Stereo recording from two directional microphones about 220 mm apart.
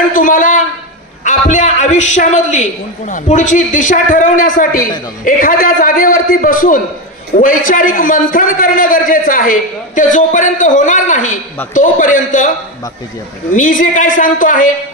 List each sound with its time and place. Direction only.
0.1 s a sound: 35° left (ahead or behind)
1.2 s a man's voice: 35° left (ahead or behind)
13.6 s a man's voice: 35° left (ahead or behind)